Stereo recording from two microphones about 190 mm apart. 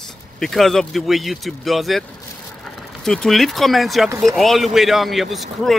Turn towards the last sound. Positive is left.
turn(degrees=0)  # may be behind; listen again after turning